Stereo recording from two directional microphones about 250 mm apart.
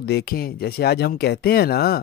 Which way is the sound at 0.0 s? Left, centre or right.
Left.